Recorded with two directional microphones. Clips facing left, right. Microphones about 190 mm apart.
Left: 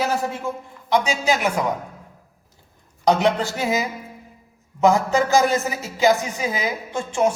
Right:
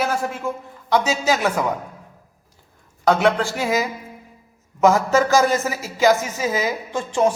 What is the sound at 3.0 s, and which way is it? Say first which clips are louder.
Speech: right 1 dB; 20° left (ahead or behind).